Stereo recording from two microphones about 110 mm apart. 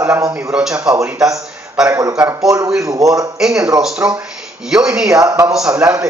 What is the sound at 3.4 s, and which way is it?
Speech, 5° right (ahead or behind).